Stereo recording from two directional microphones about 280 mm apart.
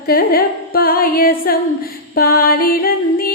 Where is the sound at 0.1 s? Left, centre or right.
Left.